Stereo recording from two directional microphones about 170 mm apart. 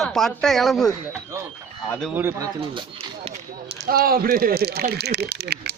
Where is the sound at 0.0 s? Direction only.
Centre (ahead or behind).